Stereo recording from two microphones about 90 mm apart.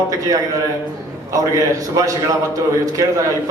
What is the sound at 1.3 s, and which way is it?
A man's voice, 40° right (ahead or behind).